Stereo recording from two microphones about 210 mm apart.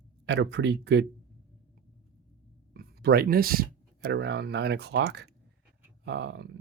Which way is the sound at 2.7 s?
50° right (ahead or behind).